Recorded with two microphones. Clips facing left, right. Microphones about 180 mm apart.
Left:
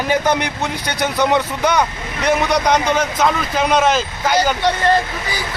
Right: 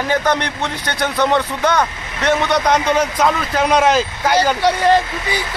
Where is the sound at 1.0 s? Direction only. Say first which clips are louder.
Even; centre (ahead or behind).